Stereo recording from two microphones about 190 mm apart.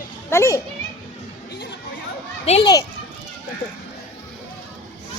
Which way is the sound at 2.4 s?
35° left (ahead or behind).